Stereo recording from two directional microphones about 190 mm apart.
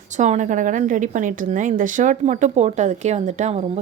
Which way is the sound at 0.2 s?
40° right (ahead or behind).